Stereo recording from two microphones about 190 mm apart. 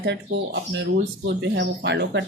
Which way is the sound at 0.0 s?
60° right (ahead or behind).